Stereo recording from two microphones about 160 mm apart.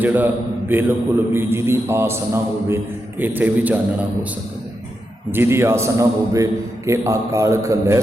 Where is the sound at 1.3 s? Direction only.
15° right (ahead or behind).